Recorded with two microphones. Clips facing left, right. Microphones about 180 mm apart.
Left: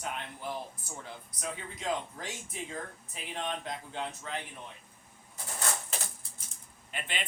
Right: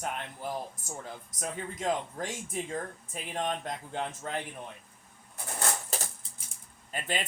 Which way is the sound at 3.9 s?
50° right (ahead or behind).